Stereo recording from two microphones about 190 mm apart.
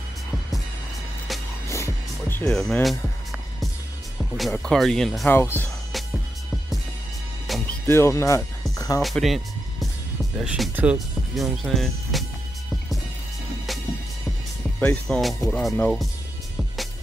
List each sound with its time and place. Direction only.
1.7 s music: 15° left (ahead or behind)
4.4 s speech: centre (ahead or behind)
7.8 s speech: 15° left (ahead or behind)
8.7 s music: 20° left (ahead or behind)
9.0 s music: centre (ahead or behind)
10.3 s speech: 5° right (ahead or behind)
14.8 s speech: 5° left (ahead or behind)